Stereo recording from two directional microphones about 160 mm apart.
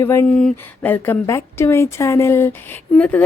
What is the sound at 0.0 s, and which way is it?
A woman's voice, 15° left (ahead or behind).